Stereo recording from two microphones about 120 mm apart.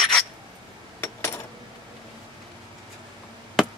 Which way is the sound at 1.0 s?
20° left (ahead or behind).